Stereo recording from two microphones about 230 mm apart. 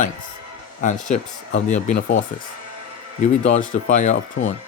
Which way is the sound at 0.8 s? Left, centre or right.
Left.